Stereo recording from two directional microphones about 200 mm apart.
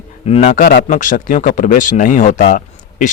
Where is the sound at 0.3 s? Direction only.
35° left (ahead or behind).